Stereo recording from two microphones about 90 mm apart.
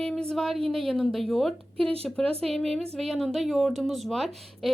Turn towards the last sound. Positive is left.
turn(degrees=0)  # may be behind; listen again after turning